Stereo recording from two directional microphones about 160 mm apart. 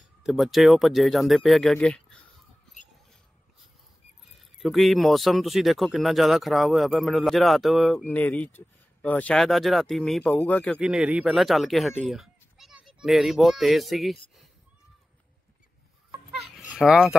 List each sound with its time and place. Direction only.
0.2 s speech: centre (ahead or behind)
4.6 s speech: centre (ahead or behind)
10.8 s speech: 5° right (ahead or behind)
16.3 s a sound: centre (ahead or behind)